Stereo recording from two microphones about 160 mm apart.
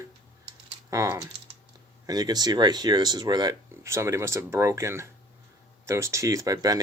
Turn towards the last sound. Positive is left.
turn(degrees=-25)  # may be behind; listen again after turning